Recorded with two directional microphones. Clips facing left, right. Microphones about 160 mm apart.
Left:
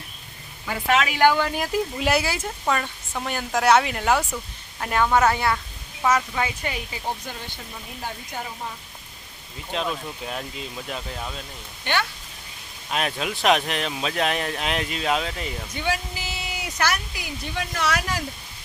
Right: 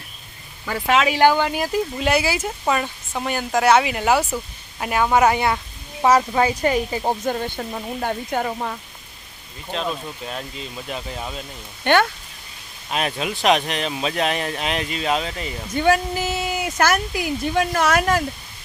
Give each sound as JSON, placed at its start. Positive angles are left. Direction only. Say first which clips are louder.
{"t": 1.1, "sound": "speech", "louder": "right 2 dB", "side_deg": -30}
{"t": 2.0, "sound": "a woman's voice", "louder": "right 4 dB", "side_deg": 0}
{"t": 6.0, "sound": "speech", "louder": "right 6 dB", "side_deg": -35}
{"t": 9.7, "sound": "speech", "louder": "right 1 dB", "side_deg": 15}
{"t": 10.2, "sound": "speech", "louder": "even", "side_deg": 0}
{"t": 11.9, "sound": "speech", "louder": "right 9 dB", "side_deg": -55}
{"t": 12.9, "sound": "speech", "louder": "right 2 dB", "side_deg": 0}
{"t": 15.7, "sound": "speech", "louder": "right 11 dB", "side_deg": -50}